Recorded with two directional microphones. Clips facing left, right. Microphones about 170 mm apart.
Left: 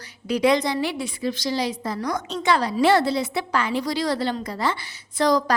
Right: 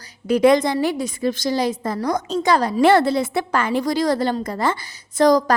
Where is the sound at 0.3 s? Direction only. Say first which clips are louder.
Right 5 dB; 50° right (ahead or behind).